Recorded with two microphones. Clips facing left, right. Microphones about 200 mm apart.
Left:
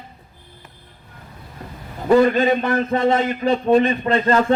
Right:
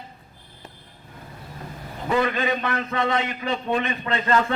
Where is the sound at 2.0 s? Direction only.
40° left (ahead or behind).